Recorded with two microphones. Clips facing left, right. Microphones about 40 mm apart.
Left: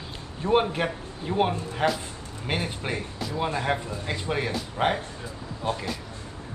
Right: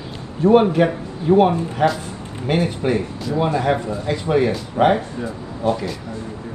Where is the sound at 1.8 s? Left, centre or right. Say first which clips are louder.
Right 7 dB; centre.